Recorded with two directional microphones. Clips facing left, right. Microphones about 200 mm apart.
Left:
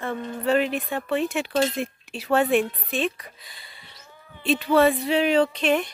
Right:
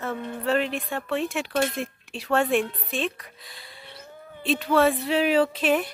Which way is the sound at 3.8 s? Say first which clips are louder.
Right 7 dB; 60° right (ahead or behind).